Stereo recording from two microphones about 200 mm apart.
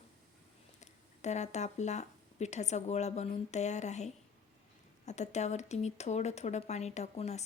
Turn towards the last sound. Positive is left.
turn(degrees=35)  # may be behind; listen again after turning